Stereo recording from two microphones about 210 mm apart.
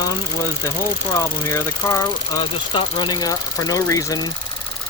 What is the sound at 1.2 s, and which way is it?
Speech, 15° left (ahead or behind).